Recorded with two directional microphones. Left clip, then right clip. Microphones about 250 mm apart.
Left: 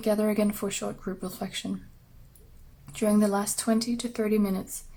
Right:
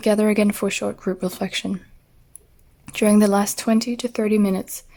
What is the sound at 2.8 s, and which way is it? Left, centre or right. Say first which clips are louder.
Speech: right 8 dB; right.